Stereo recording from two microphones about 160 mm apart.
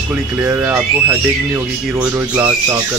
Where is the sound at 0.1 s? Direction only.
10° right (ahead or behind).